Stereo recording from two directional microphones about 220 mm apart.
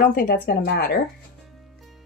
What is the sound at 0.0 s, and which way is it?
Speech, 40° left (ahead or behind).